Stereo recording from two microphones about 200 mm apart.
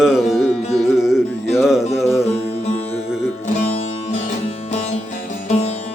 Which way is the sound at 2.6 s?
30° left (ahead or behind).